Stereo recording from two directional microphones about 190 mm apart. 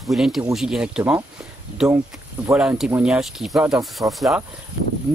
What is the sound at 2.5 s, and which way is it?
Speech, 5° right (ahead or behind).